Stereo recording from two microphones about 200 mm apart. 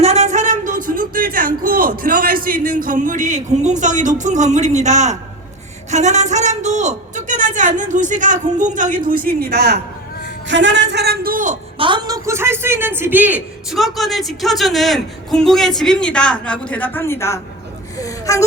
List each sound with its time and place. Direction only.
0.0 s a sound: 35° right (ahead or behind)
5.9 s speech: 35° right (ahead or behind); by 9.7 s 55° right (ahead or behind)
10.5 s a man's voice: 65° right (ahead or behind); by 11.5 s 45° right (ahead or behind)
11.8 s a woman's voice: 20° right (ahead or behind); by 17.4 s 15° left (ahead or behind)
17.9 s gasp: 15° left (ahead or behind)